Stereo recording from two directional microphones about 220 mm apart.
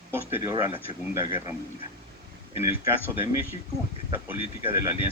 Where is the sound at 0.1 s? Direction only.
10° right (ahead or behind).